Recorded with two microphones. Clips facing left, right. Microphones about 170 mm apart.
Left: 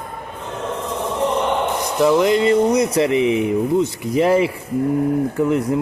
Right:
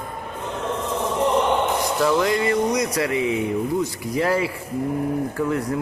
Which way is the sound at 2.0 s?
20° left (ahead or behind).